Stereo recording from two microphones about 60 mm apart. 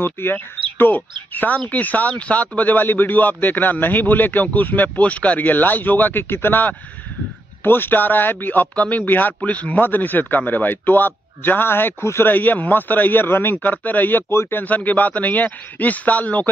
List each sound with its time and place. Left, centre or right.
0.0 s speech: left
12.3 s speech: left